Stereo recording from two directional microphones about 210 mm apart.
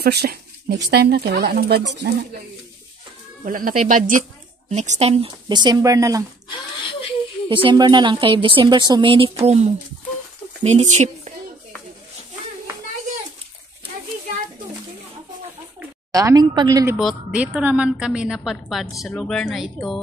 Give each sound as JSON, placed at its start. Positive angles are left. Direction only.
{"t": 0.0, "sound": "speech", "side_deg": -50}
{"t": 3.4, "sound": "speech", "side_deg": -40}
{"t": 6.9, "sound": "a sound", "side_deg": 25}
{"t": 7.4, "sound": "speech", "side_deg": -25}
{"t": 16.1, "sound": "speech", "side_deg": -15}
{"t": 17.0, "sound": "a woman's voice", "side_deg": -5}